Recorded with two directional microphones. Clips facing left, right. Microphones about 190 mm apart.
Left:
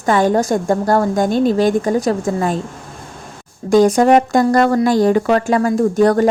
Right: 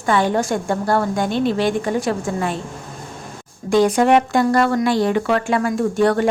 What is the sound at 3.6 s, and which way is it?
A woman's voice, 45° left (ahead or behind).